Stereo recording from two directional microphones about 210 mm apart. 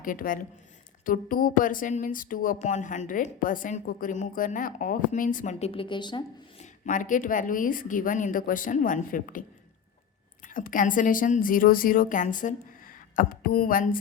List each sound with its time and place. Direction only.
0.0 s speech: 40° left (ahead or behind); by 6.7 s 20° left (ahead or behind)
6.8 s speech: 40° left (ahead or behind)
10.4 s speech: 40° left (ahead or behind)